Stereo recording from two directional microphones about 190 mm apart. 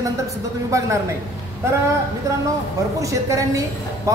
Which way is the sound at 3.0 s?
15° right (ahead or behind).